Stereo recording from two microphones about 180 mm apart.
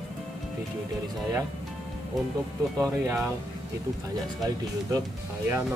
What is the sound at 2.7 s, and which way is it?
Speech, 20° right (ahead or behind).